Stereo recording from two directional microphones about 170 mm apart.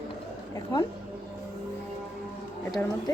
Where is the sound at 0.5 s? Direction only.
20° left (ahead or behind).